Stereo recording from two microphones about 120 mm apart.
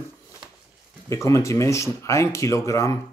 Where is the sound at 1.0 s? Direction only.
25° left (ahead or behind).